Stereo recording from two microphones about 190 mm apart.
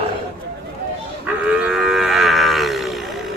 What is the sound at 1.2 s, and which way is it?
Livestock, 5° right (ahead or behind).